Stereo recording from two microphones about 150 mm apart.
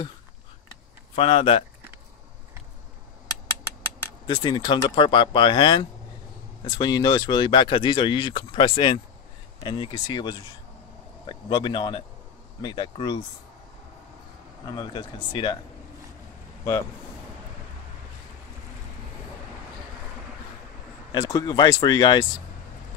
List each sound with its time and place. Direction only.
1.1 s speech: 35° left (ahead or behind)
4.3 s speech: 30° left (ahead or behind)
14.8 s speech: 30° left (ahead or behind)
21.1 s speech: 25° left (ahead or behind)